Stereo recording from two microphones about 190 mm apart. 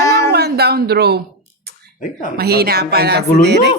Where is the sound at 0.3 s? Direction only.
55° right (ahead or behind).